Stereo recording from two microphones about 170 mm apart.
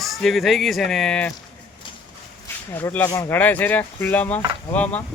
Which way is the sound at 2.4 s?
15° left (ahead or behind).